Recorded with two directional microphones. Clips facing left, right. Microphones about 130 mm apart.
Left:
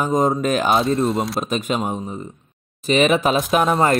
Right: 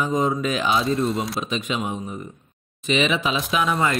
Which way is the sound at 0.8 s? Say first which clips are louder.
Left 3 dB; centre (ahead or behind).